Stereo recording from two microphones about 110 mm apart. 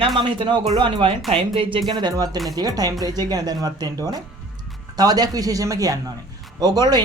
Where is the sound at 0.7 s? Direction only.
50° right (ahead or behind).